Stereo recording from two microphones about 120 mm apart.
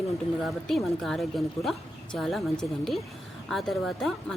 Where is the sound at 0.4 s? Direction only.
Centre (ahead or behind).